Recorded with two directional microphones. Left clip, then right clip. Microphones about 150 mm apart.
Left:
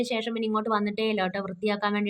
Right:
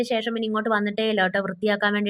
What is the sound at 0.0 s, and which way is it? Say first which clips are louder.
A woman's voice: right 4 dB; 25° right (ahead or behind).